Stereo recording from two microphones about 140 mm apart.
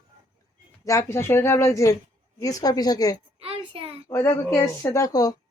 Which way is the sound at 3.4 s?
45° right (ahead or behind).